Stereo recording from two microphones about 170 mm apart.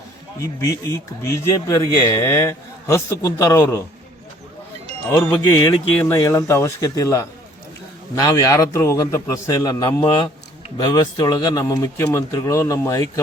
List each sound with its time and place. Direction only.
0.3 s speech: 20° left (ahead or behind)
5.3 s speech: 25° left (ahead or behind)